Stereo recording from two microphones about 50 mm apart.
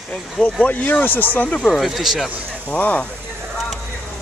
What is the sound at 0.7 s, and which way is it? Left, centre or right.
Speech, left.